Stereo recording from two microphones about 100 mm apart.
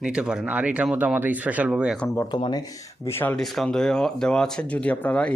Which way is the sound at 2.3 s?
45° left (ahead or behind).